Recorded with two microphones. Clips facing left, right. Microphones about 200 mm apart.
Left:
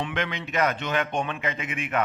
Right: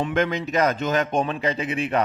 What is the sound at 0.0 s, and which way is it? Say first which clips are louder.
A man's voice: right 7 dB; 40° right (ahead or behind).